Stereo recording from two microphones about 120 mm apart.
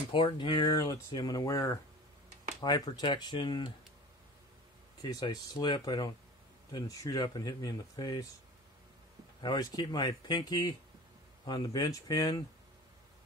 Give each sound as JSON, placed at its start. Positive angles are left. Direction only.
{"t": 0.1, "sound": "speech", "side_deg": 45}
{"t": 5.0, "sound": "speech", "side_deg": 35}
{"t": 9.4, "sound": "speech", "side_deg": 35}